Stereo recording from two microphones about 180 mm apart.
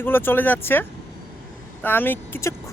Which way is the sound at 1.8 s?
10° left (ahead or behind).